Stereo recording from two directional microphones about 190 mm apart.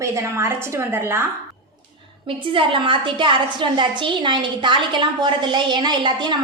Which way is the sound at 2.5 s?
25° right (ahead or behind).